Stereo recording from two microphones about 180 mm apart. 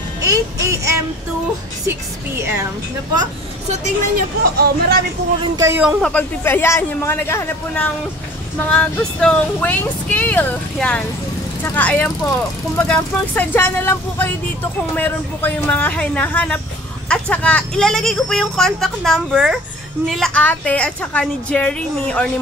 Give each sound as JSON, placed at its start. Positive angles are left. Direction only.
{"t": 0.2, "sound": "speech", "side_deg": -15}
{"t": 4.6, "sound": "speech", "side_deg": -55}
{"t": 5.6, "sound": "speech", "side_deg": -10}